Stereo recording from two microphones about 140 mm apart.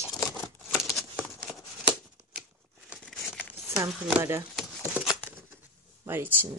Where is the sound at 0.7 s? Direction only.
Centre (ahead or behind).